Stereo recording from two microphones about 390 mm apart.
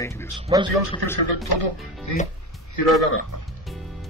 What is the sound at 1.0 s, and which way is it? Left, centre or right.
Speech, right.